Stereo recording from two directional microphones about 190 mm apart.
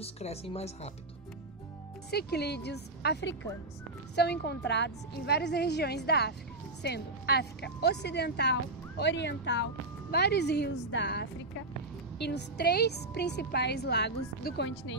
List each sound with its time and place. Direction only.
0.0 s speech: 35° left (ahead or behind)
2.0 s speech: 60° left (ahead or behind)